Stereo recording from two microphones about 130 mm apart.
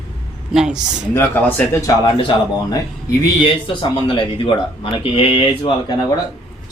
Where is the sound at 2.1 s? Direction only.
40° left (ahead or behind).